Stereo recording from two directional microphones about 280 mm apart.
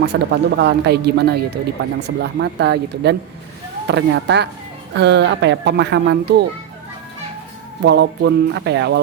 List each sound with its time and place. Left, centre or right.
0.0 s speech: right
7.8 s speech: right